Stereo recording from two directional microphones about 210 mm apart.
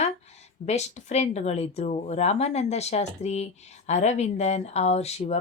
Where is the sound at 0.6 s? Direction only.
30° left (ahead or behind).